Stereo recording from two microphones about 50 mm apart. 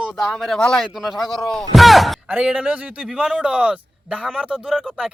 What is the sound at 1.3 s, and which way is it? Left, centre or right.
Speech, centre.